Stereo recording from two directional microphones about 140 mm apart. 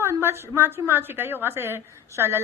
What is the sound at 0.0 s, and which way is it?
A woman's voice, 15° right (ahead or behind).